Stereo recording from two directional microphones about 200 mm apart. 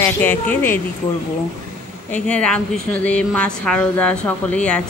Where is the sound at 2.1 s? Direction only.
5° left (ahead or behind).